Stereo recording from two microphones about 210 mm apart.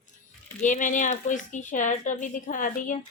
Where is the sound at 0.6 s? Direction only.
35° left (ahead or behind).